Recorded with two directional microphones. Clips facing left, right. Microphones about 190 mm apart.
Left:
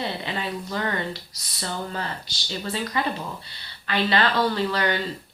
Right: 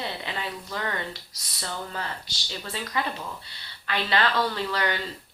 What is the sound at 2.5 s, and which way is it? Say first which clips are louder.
Speech: left 4 dB; 30° left (ahead or behind).